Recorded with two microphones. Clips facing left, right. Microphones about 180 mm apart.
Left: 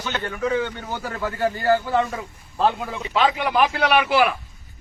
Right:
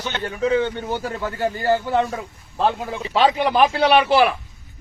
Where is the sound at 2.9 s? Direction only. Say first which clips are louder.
Right 3 dB; 30° right (ahead or behind).